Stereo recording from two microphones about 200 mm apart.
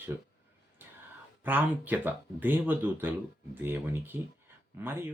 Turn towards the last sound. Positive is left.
turn(degrees=-10)  # may be behind; listen again after turning